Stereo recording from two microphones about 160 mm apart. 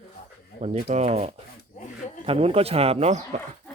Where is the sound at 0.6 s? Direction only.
45° right (ahead or behind).